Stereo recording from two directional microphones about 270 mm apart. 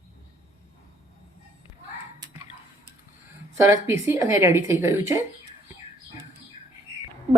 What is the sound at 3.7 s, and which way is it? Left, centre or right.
Speech, centre.